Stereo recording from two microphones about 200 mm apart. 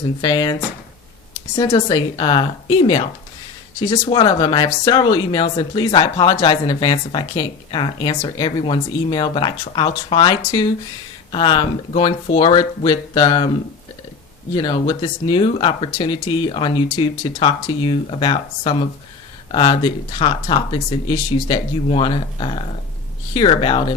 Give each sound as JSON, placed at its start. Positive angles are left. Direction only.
{"t": 0.2, "sound": "speech", "side_deg": 20}
{"t": 1.5, "sound": "speech", "side_deg": 20}
{"t": 14.5, "sound": "speech", "side_deg": 20}